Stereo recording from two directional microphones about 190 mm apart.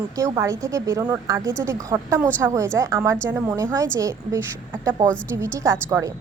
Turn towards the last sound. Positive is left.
turn(degrees=-15)  # may be behind; listen again after turning